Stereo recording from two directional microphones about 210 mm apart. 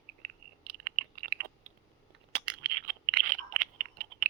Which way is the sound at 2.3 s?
50° right (ahead or behind).